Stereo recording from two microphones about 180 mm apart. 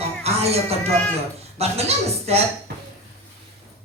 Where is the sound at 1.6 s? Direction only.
35° right (ahead or behind).